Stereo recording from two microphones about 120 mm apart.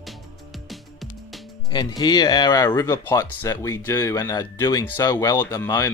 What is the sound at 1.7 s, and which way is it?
Speech, 35° left (ahead or behind).